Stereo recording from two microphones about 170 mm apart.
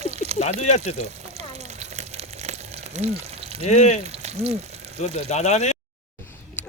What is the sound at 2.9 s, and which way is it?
Speech, 40° right (ahead or behind).